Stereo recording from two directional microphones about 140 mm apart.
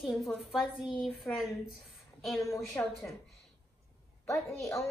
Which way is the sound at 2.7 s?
Centre (ahead or behind).